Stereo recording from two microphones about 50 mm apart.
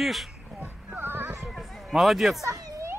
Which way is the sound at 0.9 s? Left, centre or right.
Right.